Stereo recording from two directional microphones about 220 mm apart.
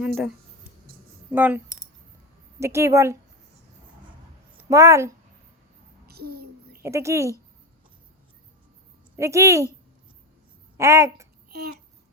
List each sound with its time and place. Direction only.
0.0 s speech: centre (ahead or behind)
4.7 s speech: 15° right (ahead or behind)
6.1 s a sound: 45° right (ahead or behind)
6.8 s speech: 10° right (ahead or behind)
9.1 s speech: 15° right (ahead or behind)
10.8 s speech: 15° right (ahead or behind)
11.4 s babbling: 45° right (ahead or behind)